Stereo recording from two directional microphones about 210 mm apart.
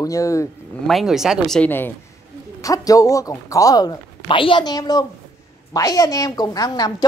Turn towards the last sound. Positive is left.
turn(degrees=20)  # may be behind; listen again after turning